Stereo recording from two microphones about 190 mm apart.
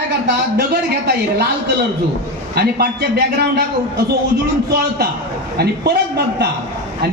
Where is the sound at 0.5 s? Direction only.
55° right (ahead or behind).